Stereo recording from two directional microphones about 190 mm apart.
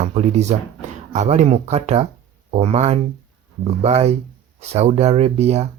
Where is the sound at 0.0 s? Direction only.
35° right (ahead or behind).